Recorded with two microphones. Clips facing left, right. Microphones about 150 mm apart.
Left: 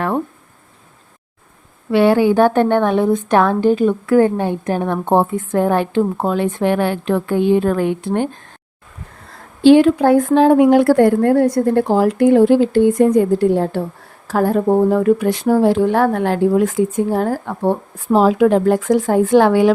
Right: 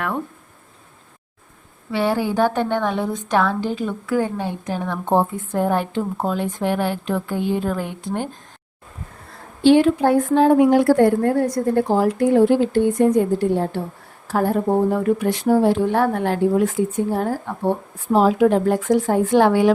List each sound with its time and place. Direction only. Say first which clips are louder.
1.9 s a woman's voice: left 8 dB; 70° left (ahead or behind)
9.6 s speech: left 4 dB; 90° left
18.1 s speech: left 3 dB; 90° left